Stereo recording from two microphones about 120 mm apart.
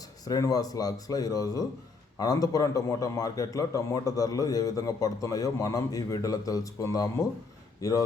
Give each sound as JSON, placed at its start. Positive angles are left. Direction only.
{"t": 0.3, "sound": "a man's voice", "side_deg": 30}